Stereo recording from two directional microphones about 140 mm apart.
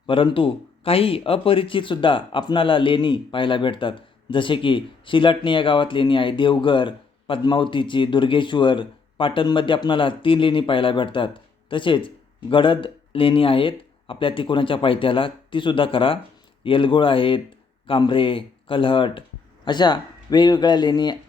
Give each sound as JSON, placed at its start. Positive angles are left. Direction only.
{"t": 0.1, "sound": "speech", "side_deg": 40}